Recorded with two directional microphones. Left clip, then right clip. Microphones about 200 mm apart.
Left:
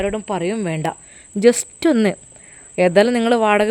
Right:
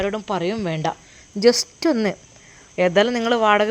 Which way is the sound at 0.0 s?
30° left (ahead or behind).